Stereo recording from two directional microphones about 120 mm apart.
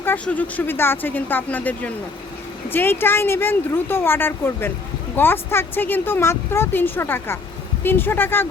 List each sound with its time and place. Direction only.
0.0 s a woman's voice: 15° left (ahead or behind)